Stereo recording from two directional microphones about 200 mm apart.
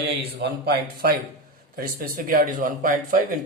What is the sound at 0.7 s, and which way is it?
A man's voice, 50° right (ahead or behind).